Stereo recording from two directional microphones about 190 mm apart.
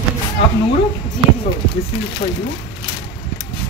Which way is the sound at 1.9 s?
30° left (ahead or behind).